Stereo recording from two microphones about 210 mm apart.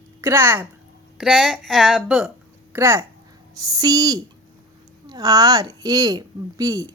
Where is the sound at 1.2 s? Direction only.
Centre (ahead or behind).